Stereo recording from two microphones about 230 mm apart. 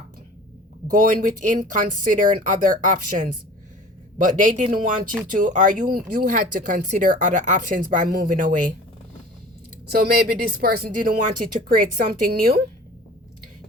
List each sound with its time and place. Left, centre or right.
0.9 s speech: right
9.9 s speech: right